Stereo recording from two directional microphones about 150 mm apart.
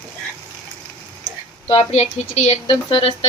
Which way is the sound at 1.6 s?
40° left (ahead or behind).